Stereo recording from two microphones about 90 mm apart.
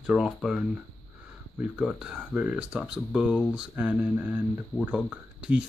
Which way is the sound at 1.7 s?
10° right (ahead or behind).